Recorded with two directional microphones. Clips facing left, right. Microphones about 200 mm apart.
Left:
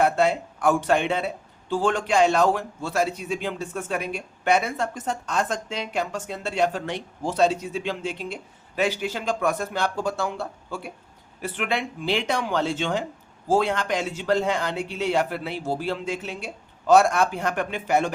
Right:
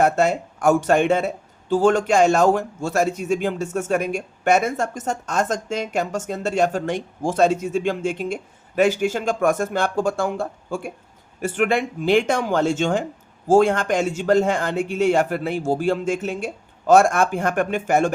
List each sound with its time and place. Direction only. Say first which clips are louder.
0.0 s a man's voice: right 2 dB; 45° right (ahead or behind)